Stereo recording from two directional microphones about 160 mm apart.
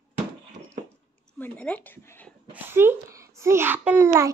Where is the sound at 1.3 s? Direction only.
10° left (ahead or behind).